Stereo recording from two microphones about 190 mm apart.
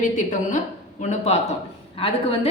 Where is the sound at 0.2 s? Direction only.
40° left (ahead or behind).